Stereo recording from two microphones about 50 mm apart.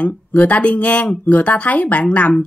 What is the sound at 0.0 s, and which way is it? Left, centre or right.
Speech, left.